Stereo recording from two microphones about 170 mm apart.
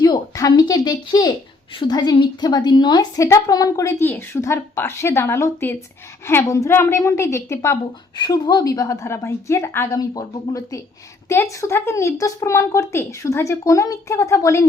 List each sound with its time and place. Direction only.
0.0 s a woman's voice: 20° left (ahead or behind)